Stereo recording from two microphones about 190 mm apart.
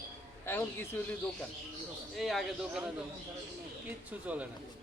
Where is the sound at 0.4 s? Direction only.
10° left (ahead or behind).